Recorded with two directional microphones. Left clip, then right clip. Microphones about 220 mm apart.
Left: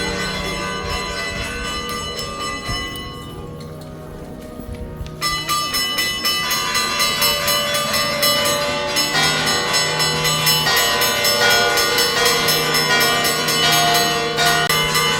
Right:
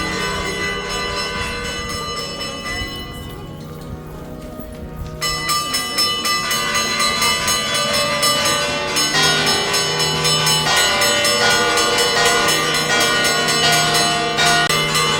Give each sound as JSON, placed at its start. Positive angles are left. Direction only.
{"t": 5.2, "sound": "train", "side_deg": -10}